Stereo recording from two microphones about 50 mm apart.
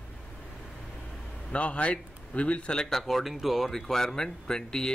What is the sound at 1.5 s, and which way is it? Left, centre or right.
Speech, left.